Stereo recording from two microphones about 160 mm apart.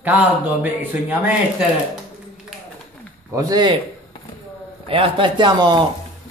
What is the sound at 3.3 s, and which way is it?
Speech, 25° right (ahead or behind).